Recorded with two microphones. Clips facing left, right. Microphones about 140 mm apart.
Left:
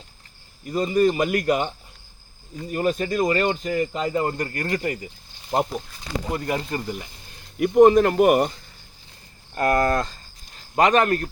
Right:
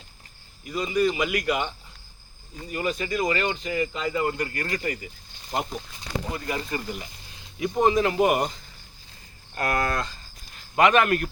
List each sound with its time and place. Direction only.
0.6 s speech: 45° left (ahead or behind)
6.3 s speech: 50° left (ahead or behind)
7.5 s speech: 60° left (ahead or behind)
9.6 s speech: 40° left (ahead or behind)